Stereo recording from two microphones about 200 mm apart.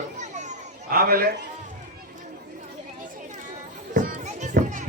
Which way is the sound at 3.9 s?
40° right (ahead or behind).